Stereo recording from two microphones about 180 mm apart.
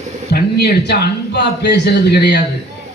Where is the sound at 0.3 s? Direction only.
60° left (ahead or behind).